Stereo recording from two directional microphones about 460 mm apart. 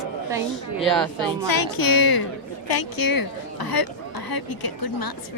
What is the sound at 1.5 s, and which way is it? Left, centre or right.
A woman's voice, left.